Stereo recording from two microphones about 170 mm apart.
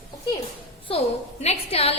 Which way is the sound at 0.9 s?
40° left (ahead or behind).